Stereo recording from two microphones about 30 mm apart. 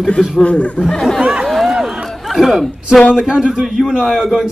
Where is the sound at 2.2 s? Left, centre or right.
Centre.